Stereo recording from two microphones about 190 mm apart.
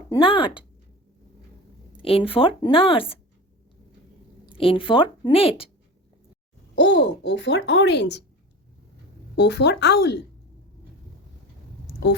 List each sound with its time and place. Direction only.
0.1 s speech: 25° left (ahead or behind)
2.0 s speech: 30° left (ahead or behind)
4.5 s speech: 30° left (ahead or behind)
6.7 s speech: 70° left (ahead or behind)
9.3 s speech: 65° left (ahead or behind)